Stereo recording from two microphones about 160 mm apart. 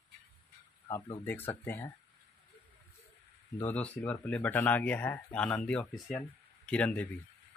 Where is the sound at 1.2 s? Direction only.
10° left (ahead or behind).